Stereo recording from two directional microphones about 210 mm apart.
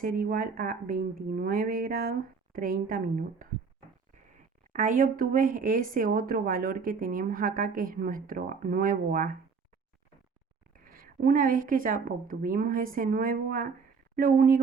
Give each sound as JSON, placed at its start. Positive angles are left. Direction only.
{"t": 0.0, "sound": "speech", "side_deg": -45}
{"t": 4.7, "sound": "speech", "side_deg": -40}
{"t": 10.8, "sound": "speech", "side_deg": -45}